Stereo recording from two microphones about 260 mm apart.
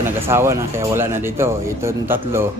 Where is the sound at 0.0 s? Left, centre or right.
Centre.